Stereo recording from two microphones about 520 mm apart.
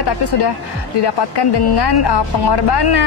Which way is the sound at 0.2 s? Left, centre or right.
Left.